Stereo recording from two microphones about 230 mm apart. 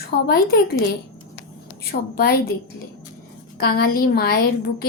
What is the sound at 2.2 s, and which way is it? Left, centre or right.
Speech, left.